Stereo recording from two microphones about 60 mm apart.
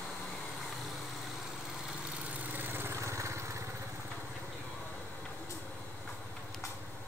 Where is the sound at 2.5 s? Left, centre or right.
Right.